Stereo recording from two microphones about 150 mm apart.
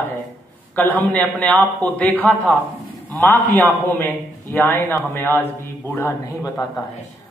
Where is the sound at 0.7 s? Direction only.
10° left (ahead or behind).